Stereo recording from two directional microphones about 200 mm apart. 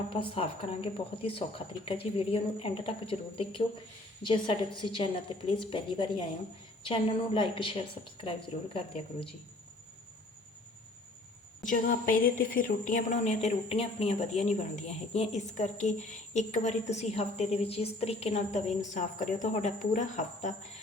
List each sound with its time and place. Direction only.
0.1 s speech: 25° left (ahead or behind)
11.7 s a woman's voice: 45° left (ahead or behind)